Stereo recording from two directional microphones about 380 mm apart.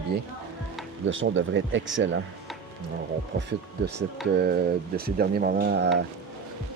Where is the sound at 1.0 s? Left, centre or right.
Right.